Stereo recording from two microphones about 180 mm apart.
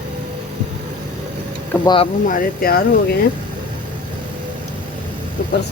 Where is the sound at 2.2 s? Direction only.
50° left (ahead or behind).